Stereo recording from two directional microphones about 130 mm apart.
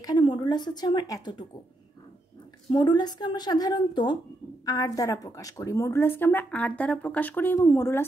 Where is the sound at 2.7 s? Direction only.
35° left (ahead or behind).